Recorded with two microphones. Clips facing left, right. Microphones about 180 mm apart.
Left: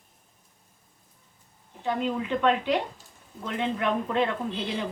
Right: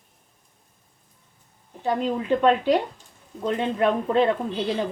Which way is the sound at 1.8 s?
35° right (ahead or behind).